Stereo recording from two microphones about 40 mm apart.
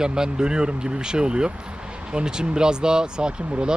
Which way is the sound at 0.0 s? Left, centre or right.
Centre.